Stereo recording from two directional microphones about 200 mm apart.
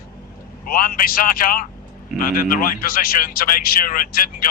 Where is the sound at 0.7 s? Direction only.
45° left (ahead or behind).